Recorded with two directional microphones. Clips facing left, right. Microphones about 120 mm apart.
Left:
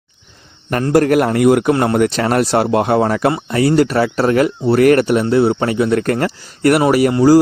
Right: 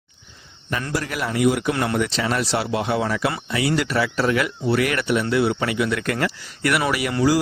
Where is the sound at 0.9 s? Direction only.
55° left (ahead or behind).